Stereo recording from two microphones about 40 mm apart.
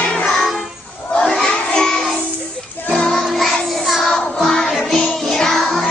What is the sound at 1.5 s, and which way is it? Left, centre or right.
Child singing, centre.